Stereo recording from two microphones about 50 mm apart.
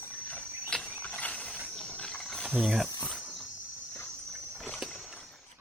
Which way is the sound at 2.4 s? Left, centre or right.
Centre.